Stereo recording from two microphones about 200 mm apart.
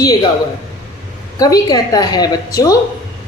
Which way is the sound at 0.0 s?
20° left (ahead or behind).